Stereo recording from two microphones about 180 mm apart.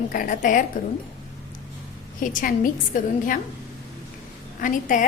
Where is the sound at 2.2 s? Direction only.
50° left (ahead or behind).